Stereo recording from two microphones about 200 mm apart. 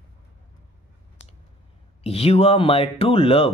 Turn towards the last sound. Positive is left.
turn(degrees=25)  # may be behind; listen again after turning